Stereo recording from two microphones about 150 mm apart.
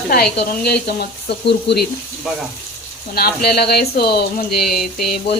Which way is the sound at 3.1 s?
90° left.